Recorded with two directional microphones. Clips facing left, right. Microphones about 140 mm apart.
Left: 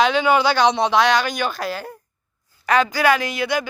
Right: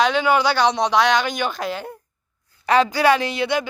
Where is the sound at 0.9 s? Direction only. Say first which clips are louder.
Left 1 dB; 15° right (ahead or behind).